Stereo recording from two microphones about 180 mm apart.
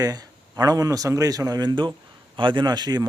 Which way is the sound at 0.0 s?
20° right (ahead or behind).